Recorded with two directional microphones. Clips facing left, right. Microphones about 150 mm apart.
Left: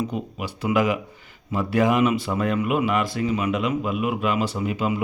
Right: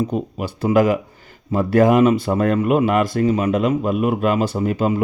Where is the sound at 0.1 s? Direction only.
40° right (ahead or behind).